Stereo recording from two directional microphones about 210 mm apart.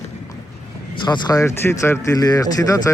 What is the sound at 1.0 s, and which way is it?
Speech, 20° left (ahead or behind).